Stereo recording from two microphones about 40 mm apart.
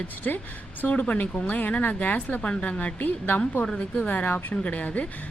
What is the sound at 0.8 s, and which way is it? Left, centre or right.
A woman's voice, left.